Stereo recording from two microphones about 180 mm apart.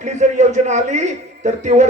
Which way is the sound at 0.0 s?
40° right (ahead or behind).